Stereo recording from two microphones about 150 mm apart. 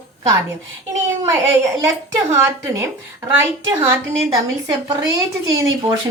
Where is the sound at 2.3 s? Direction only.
15° right (ahead or behind).